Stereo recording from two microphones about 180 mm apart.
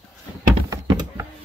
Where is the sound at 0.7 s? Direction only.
20° right (ahead or behind).